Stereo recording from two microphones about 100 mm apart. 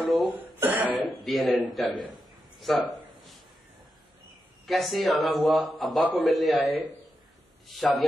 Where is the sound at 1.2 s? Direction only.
Centre (ahead or behind).